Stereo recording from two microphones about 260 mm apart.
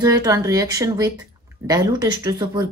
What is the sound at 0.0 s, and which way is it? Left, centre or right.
A woman's voice, centre.